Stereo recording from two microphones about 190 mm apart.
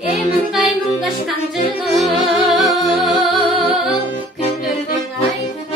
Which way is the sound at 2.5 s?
Centre (ahead or behind).